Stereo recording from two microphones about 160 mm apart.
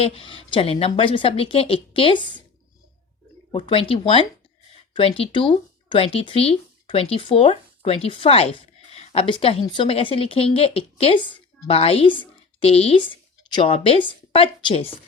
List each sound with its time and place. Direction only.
0.0 s speech: 35° left (ahead or behind)
3.5 s speech: 35° left (ahead or behind)